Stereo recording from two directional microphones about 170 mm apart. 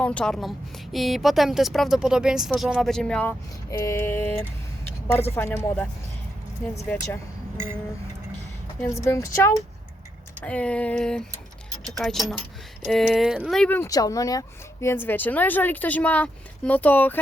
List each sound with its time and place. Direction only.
0.0 s speech: 5° left (ahead or behind)
9.0 s speech: 15° left (ahead or behind)
10.4 s speech: 5° left (ahead or behind)